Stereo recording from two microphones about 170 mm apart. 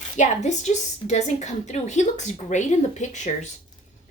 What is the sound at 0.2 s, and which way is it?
A woman's voice, 45° left (ahead or behind).